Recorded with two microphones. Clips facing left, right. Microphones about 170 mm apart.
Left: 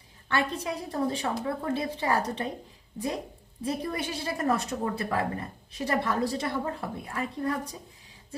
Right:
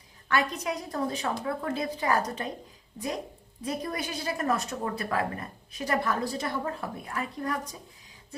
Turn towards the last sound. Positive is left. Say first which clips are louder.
# left 2 dB
turn(degrees=30)  # may be behind; listen again after turning